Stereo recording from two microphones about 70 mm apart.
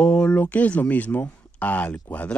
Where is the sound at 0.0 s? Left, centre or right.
Centre.